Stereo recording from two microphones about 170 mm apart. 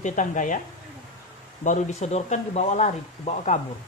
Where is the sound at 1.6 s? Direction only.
45° left (ahead or behind).